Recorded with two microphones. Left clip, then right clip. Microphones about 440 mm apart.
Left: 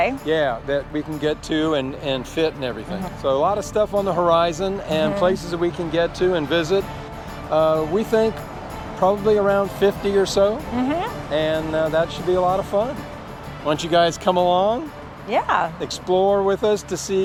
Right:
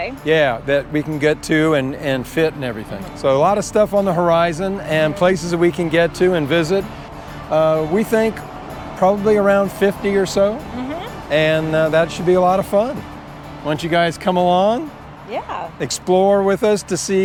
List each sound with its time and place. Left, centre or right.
0.3 s speech: right
3.2 s speech: right
11.3 s speech: right
13.7 s speech: right
15.3 s speech: left
15.8 s speech: right